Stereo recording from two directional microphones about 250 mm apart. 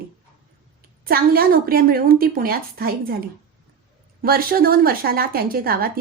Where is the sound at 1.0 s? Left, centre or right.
Right.